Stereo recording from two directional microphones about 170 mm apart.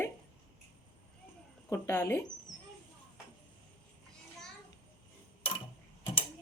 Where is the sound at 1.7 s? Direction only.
15° left (ahead or behind).